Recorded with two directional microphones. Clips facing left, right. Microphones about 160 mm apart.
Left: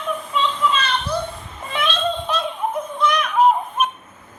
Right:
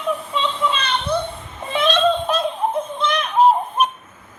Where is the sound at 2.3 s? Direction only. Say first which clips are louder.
Right 3 dB; 40° right (ahead or behind).